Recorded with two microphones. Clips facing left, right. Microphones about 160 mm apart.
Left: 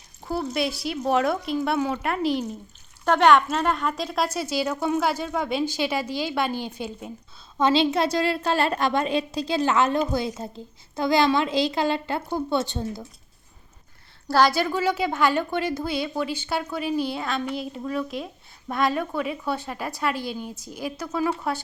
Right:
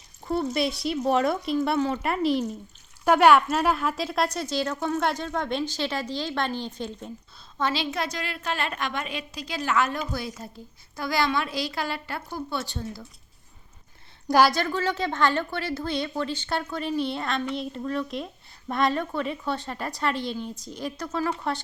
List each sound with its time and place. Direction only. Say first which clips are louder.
0.3 s a woman's voice: right 1 dB; centre (ahead or behind)
7.6 s a woman's voice: left 7 dB; 25° left (ahead or behind)
14.3 s a woman's voice: even; 10° right (ahead or behind)
14.5 s a woman's voice: left 3 dB; 10° left (ahead or behind)